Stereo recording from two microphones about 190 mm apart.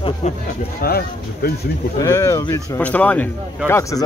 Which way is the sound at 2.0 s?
15° left (ahead or behind).